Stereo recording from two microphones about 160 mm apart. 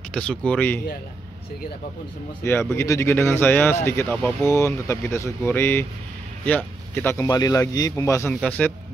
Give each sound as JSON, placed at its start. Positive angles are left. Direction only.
{"t": 0.1, "sound": "speech", "side_deg": 5}
{"t": 2.7, "sound": "speech", "side_deg": 15}